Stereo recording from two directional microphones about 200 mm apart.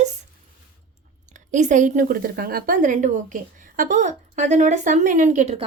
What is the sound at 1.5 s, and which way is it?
A woman's voice, 40° right (ahead or behind).